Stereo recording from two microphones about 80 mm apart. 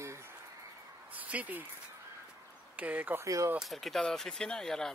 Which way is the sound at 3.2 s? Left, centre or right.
Right.